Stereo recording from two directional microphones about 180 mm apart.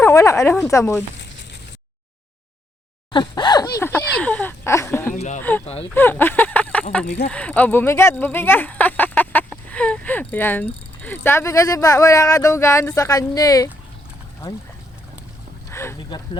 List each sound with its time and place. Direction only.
0.0 s speech: 15° left (ahead or behind)
3.1 s speech: 25° left (ahead or behind)
5.1 s speech: 40° left (ahead or behind)
5.4 s speech: 10° left (ahead or behind)
15.7 s a sound: 15° left (ahead or behind)
16.0 s speech: 25° left (ahead or behind)